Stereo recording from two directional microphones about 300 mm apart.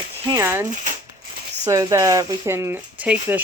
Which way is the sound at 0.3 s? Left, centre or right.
Centre.